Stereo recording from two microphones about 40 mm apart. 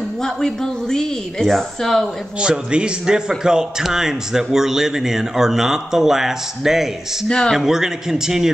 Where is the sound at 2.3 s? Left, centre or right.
Right.